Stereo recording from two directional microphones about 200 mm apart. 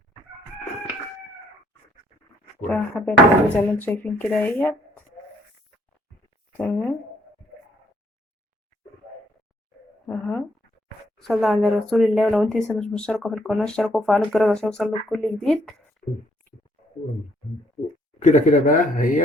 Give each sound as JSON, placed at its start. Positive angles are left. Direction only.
{"t": 2.6, "sound": "speech", "side_deg": 10}
{"t": 6.6, "sound": "speech", "side_deg": 5}
{"t": 10.1, "sound": "speech", "side_deg": 5}
{"t": 18.2, "sound": "speech", "side_deg": 40}